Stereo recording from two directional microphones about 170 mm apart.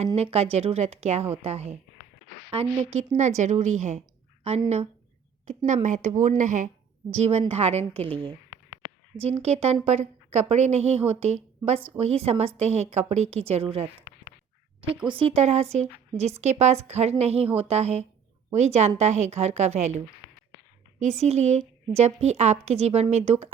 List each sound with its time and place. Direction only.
0.2 s a woman's voice: 35° right (ahead or behind)
5.5 s a woman's voice: 45° right (ahead or behind)
9.4 s a woman's voice: 35° right (ahead or behind)
21.0 s a woman's voice: 40° right (ahead or behind)